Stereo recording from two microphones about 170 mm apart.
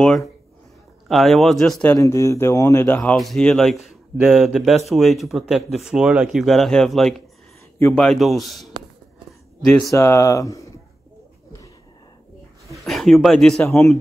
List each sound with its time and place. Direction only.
1.0 s speech: centre (ahead or behind)
2.0 s speech: 15° left (ahead or behind); by 8.6 s centre (ahead or behind)
9.8 s speech: 15° left (ahead or behind)
12.8 s speech: centre (ahead or behind)